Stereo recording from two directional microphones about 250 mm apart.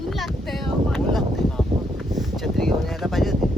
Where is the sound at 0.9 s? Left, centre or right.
Centre.